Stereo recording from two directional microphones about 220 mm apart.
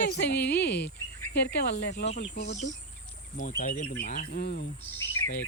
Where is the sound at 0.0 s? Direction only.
50° left (ahead or behind).